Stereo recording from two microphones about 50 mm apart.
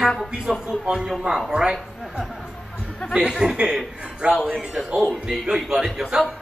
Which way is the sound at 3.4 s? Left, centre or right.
Centre.